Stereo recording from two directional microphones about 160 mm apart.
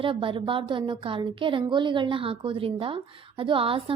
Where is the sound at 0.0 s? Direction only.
35° right (ahead or behind).